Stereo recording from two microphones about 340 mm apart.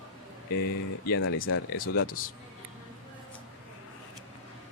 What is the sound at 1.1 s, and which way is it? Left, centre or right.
Speech, left.